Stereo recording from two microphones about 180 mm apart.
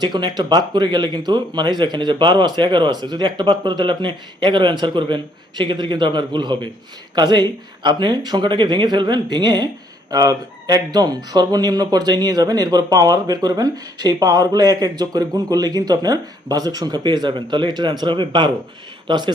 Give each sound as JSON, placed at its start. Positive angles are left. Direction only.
{"t": 0.0, "sound": "speech", "side_deg": -20}